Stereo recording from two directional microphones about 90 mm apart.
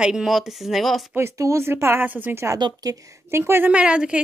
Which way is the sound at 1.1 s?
30° right (ahead or behind).